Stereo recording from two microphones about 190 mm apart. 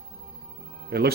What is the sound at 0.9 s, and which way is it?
Speech, 55° right (ahead or behind).